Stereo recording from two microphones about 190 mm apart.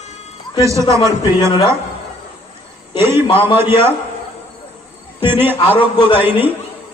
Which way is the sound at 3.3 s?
30° left (ahead or behind).